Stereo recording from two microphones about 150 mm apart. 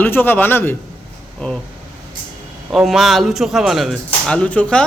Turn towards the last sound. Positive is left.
turn(degrees=10)  # may be behind; listen again after turning